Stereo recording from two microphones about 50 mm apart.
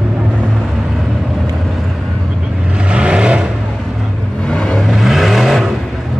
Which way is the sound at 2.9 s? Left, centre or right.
Right.